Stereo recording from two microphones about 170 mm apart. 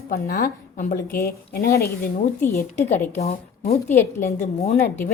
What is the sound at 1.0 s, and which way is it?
Speech, 60° left (ahead or behind).